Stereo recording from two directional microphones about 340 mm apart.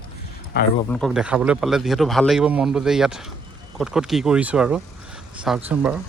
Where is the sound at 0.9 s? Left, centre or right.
Centre.